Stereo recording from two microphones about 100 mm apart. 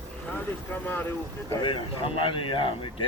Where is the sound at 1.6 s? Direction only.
60° left (ahead or behind).